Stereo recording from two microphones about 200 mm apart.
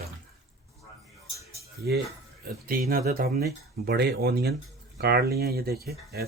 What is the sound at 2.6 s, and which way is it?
Speech, 45° right (ahead or behind).